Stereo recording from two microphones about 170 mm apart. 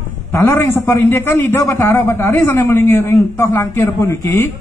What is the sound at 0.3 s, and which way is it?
A man's voice, 15° left (ahead or behind).